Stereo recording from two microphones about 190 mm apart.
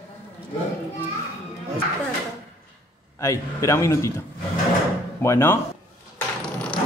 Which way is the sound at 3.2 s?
15° left (ahead or behind).